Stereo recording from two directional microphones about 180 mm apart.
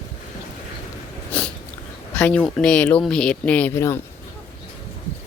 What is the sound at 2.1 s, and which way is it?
Speech, 5° left (ahead or behind).